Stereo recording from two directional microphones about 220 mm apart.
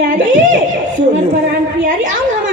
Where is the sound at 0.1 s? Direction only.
35° right (ahead or behind).